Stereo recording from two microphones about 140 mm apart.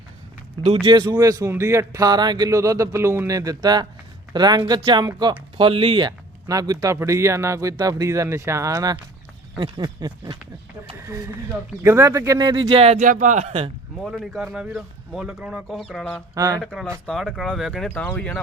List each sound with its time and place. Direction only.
0.9 s speech: 35° right (ahead or behind)
11.8 s speech: 20° right (ahead or behind)
12.5 s speech: 35° right (ahead or behind)
12.9 s speech: 60° right (ahead or behind)
14.0 s speech: centre (ahead or behind)
16.3 s speech: 25° right (ahead or behind)
16.6 s speech: 5° left (ahead or behind)